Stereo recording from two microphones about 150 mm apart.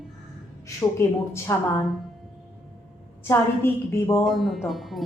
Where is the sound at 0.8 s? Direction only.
15° left (ahead or behind).